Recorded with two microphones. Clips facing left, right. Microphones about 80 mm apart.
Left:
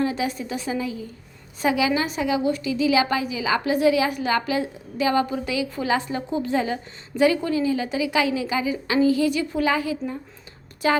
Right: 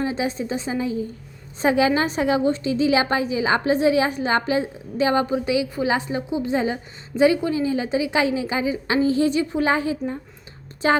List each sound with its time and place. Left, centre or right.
0.0 s a woman's voice: right